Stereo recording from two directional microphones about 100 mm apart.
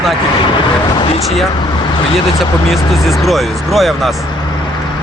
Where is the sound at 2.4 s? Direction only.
Centre (ahead or behind).